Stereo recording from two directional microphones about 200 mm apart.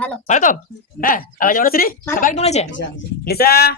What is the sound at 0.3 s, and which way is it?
Speech, 40° left (ahead or behind).